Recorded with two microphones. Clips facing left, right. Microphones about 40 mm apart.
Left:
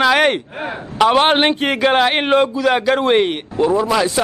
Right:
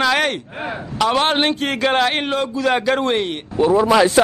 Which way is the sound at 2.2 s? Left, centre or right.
Left.